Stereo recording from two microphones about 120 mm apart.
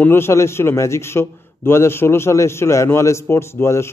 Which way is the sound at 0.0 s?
20° left (ahead or behind).